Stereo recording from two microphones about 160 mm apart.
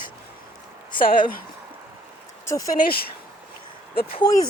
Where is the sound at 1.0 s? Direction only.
65° left (ahead or behind).